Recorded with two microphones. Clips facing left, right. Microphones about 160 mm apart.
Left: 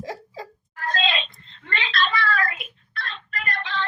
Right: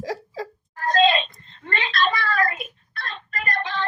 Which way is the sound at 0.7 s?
40° right (ahead or behind).